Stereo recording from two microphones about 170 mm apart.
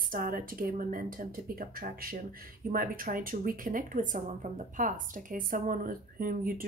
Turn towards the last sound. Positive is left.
turn(degrees=-55)  # may be behind; listen again after turning